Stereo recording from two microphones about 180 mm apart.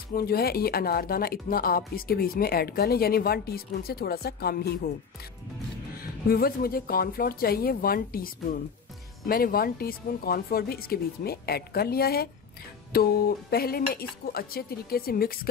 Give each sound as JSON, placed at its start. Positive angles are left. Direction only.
{"t": 0.1, "sound": "speech", "side_deg": 55}
{"t": 6.2, "sound": "speech", "side_deg": 55}
{"t": 9.3, "sound": "speech", "side_deg": 55}